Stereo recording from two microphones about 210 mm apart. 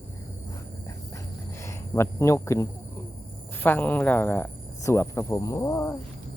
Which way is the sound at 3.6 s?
10° left (ahead or behind).